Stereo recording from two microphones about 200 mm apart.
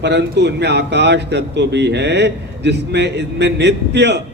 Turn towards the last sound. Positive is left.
turn(degrees=-60)  # may be behind; listen again after turning